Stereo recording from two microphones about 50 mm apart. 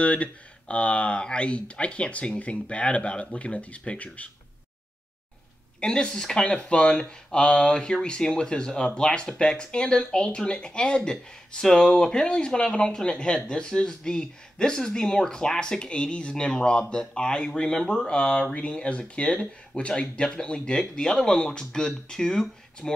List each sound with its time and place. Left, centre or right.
0.0 s speech: left
5.8 s speech: centre